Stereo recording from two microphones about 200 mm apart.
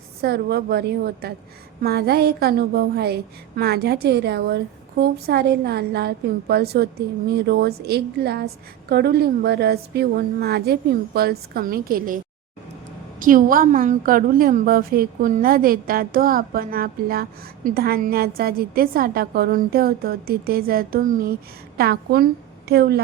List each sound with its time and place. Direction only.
0.2 s a woman's voice: 55° right (ahead or behind)